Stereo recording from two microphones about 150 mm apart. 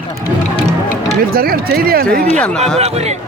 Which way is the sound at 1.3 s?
85° right.